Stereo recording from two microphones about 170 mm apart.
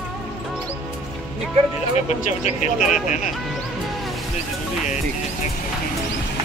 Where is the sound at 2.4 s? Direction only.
45° left (ahead or behind).